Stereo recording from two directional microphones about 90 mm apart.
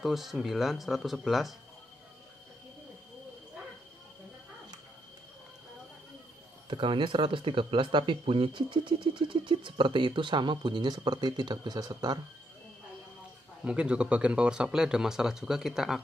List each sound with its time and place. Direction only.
0.0 s speech: 5° right (ahead or behind)
6.7 s speech: 70° right (ahead or behind); by 12.2 s 50° right (ahead or behind)
13.7 s speech: 10° right (ahead or behind)